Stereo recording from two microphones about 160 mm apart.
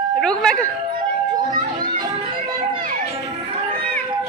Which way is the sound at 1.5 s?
55° right (ahead or behind).